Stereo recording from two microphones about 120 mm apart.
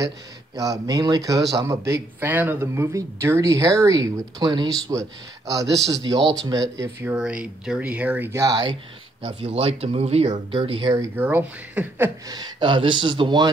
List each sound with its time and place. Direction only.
0.6 s a man's voice: 30° right (ahead or behind)
7.2 s speech: 5° right (ahead or behind)
8.3 s speech: 30° right (ahead or behind)
9.2 s speech: 55° right (ahead or behind)
11.1 s speech: 15° right (ahead or behind)
12.3 s speech: 35° right (ahead or behind)